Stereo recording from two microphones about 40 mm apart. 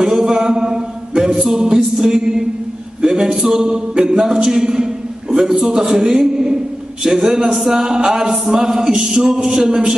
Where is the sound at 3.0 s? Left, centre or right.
Centre.